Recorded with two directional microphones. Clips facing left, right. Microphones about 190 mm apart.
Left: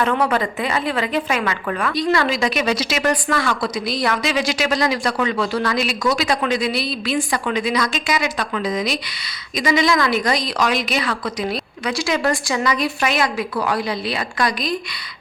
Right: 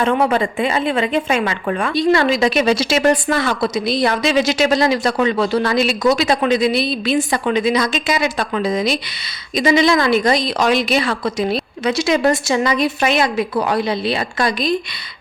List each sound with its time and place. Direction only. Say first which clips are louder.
0.0 s a woman's voice: right 3 dB; 25° right (ahead or behind)